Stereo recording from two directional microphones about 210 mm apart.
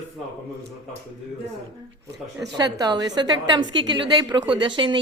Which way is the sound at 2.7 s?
20° right (ahead or behind).